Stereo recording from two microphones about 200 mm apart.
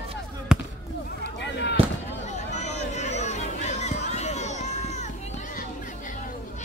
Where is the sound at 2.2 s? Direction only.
35° left (ahead or behind).